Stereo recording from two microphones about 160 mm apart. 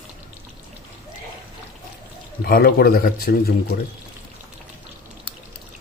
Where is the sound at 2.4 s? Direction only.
75° left (ahead or behind).